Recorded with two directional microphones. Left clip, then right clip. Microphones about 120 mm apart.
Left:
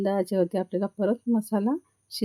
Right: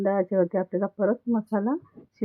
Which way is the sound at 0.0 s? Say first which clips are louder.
Right 2 dB; 30° left (ahead or behind).